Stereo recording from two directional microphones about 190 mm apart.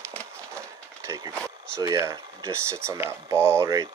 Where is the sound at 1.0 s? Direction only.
15° right (ahead or behind).